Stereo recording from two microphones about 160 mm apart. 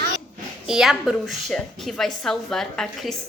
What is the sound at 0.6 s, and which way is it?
A woman's voice, 5° right (ahead or behind).